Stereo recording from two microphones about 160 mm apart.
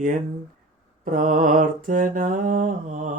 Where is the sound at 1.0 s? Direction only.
55° right (ahead or behind).